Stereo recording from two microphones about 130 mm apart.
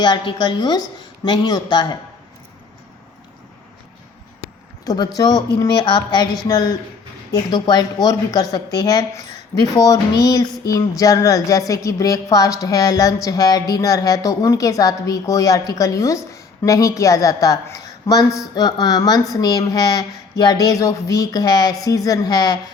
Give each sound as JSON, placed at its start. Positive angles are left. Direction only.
{"t": 0.0, "sound": "a woman's voice", "side_deg": 35}
{"t": 4.9, "sound": "a woman's voice", "side_deg": 30}